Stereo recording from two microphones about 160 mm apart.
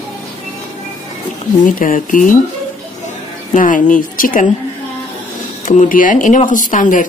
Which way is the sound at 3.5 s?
55° left (ahead or behind).